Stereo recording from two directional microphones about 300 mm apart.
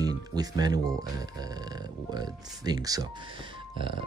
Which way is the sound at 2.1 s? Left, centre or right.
Centre.